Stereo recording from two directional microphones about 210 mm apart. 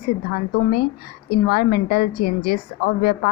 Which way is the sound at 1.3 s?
45° left (ahead or behind).